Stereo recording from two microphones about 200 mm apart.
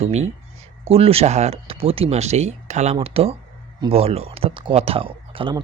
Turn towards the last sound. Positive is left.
turn(degrees=-25)  # may be behind; listen again after turning